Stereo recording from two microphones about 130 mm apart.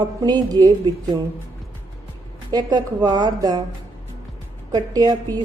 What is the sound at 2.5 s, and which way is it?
A woman's voice, 30° right (ahead or behind).